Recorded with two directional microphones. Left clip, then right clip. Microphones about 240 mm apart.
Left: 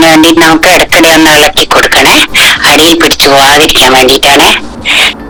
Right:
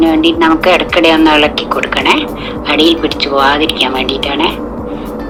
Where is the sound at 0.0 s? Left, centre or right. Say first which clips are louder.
Left 7 dB; left.